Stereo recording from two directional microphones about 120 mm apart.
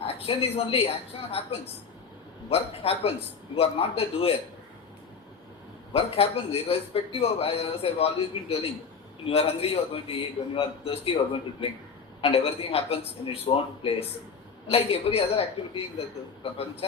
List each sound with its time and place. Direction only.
0.0 s a man's voice: 55° left (ahead or behind)
5.9 s a man's voice: 55° left (ahead or behind)
12.2 s a man's voice: 55° left (ahead or behind)